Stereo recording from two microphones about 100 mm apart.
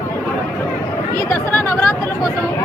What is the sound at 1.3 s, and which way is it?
Speech, 20° left (ahead or behind).